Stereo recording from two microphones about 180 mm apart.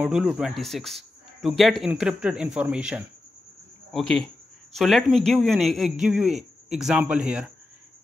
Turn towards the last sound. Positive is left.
turn(degrees=-5)  # may be behind; listen again after turning